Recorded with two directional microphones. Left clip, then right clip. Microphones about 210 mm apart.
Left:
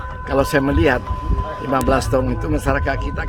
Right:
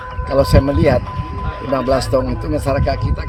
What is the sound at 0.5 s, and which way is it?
Speech, 10° left (ahead or behind).